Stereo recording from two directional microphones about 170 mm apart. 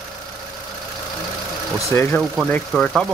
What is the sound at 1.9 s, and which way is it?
Speech, 15° left (ahead or behind).